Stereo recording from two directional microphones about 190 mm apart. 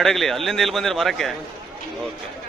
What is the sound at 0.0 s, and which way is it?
A man's voice, centre (ahead or behind).